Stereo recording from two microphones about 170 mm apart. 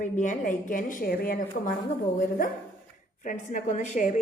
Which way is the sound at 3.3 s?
50° left (ahead or behind).